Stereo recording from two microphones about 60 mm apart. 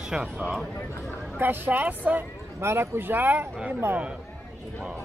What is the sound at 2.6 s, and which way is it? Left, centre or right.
Speech, right.